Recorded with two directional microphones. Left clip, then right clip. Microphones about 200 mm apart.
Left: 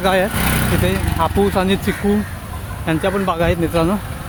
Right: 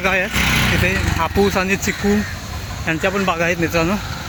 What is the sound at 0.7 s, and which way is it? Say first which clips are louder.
Speech: right 2 dB; 15° left (ahead or behind).